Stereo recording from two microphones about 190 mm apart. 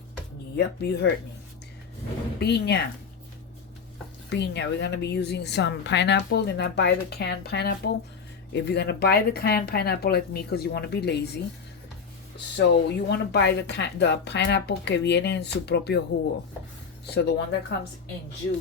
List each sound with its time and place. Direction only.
0.5 s a woman's voice: 60° left (ahead or behind)
2.4 s a woman's voice: 60° left (ahead or behind)
4.3 s a woman's voice: 65° left (ahead or behind)
12.5 s a woman's voice: 65° left (ahead or behind)
17.1 s a woman's voice: 60° left (ahead or behind)